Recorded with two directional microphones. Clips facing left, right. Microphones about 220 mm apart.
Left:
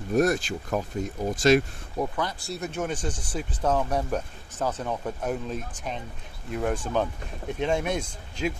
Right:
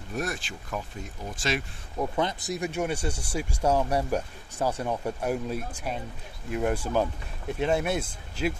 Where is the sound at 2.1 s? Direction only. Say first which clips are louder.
Right 3 dB; 20° right (ahead or behind).